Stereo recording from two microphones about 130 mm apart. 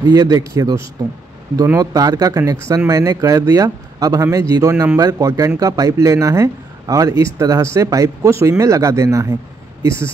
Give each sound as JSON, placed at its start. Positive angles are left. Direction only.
{"t": 0.0, "sound": "speech", "side_deg": -30}